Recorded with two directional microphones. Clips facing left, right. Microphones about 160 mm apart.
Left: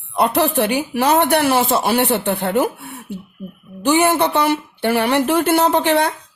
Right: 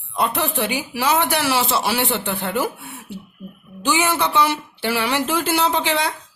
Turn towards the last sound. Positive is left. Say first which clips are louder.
# left 5 dB
turn(degrees=55)  # may be behind; listen again after turning